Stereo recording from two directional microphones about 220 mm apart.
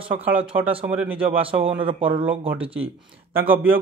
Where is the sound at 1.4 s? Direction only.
25° right (ahead or behind).